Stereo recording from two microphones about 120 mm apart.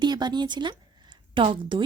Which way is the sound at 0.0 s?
35° right (ahead or behind).